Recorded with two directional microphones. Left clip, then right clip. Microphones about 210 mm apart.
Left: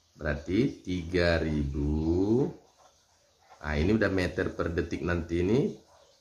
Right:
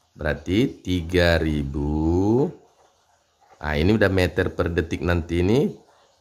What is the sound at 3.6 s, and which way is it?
Speech, 50° right (ahead or behind).